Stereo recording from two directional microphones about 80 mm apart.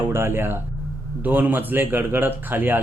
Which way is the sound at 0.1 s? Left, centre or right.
Right.